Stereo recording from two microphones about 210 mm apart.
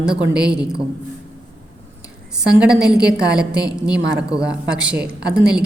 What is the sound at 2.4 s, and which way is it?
A woman's voice, 5° right (ahead or behind).